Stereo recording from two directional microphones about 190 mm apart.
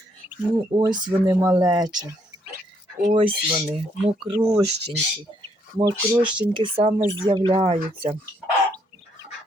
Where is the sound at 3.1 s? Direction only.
25° right (ahead or behind).